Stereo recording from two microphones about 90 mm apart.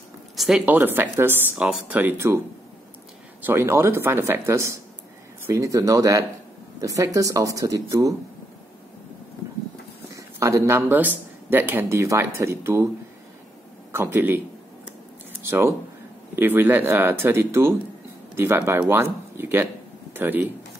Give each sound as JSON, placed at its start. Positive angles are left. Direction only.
{"t": 0.6, "sound": "speech", "side_deg": -20}
{"t": 3.4, "sound": "speech", "side_deg": -25}
{"t": 10.1, "sound": "speech", "side_deg": -35}
{"t": 13.9, "sound": "speech", "side_deg": -25}
{"t": 15.4, "sound": "speech", "side_deg": -25}